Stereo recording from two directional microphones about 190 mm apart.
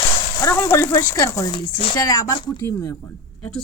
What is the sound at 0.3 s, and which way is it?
Speech, 15° left (ahead or behind).